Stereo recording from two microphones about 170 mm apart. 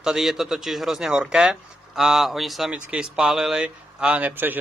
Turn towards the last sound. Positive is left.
turn(degrees=-10)  # may be behind; listen again after turning